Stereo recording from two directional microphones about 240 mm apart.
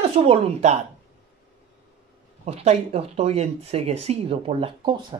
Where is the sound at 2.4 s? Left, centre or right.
Right.